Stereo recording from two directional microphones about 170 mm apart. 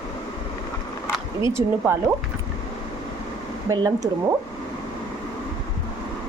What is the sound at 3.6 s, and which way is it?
Speech, 20° right (ahead or behind).